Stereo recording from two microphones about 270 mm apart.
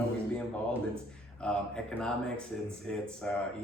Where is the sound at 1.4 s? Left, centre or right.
Centre.